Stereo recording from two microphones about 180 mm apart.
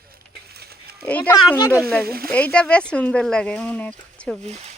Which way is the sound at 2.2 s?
10° left (ahead or behind).